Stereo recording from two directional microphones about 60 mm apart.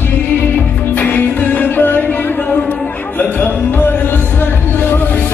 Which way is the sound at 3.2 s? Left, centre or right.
Left.